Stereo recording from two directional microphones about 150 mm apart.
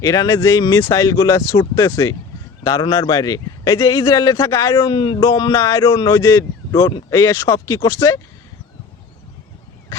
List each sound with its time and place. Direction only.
0.0 s speech: 20° left (ahead or behind)